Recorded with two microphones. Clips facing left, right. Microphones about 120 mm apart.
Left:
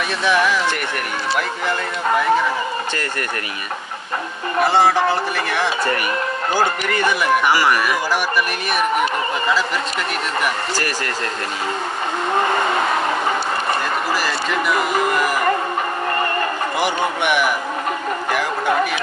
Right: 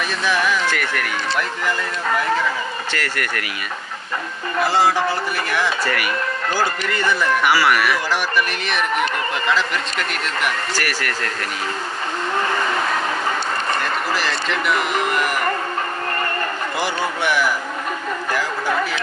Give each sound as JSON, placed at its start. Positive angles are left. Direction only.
{"t": 0.2, "sound": "speech", "side_deg": 65}
{"t": 2.9, "sound": "speech", "side_deg": 25}
{"t": 5.0, "sound": "speech", "side_deg": 20}
{"t": 10.8, "sound": "speech", "side_deg": 20}
{"t": 14.3, "sound": "speech", "side_deg": 5}
{"t": 16.8, "sound": "speech", "side_deg": 20}